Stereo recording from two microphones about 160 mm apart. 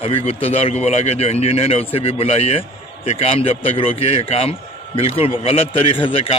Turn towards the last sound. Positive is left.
turn(degrees=35)  # may be behind; listen again after turning